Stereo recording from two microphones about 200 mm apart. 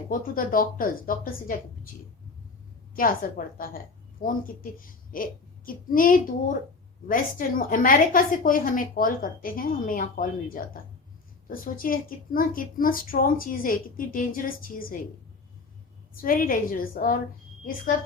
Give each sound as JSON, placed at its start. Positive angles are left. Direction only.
{"t": 0.1, "sound": "a woman's voice", "side_deg": 45}
{"t": 2.9, "sound": "a woman's voice", "side_deg": 45}
{"t": 16.1, "sound": "a woman's voice", "side_deg": 45}